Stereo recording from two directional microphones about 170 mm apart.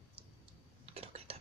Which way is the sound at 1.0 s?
35° right (ahead or behind).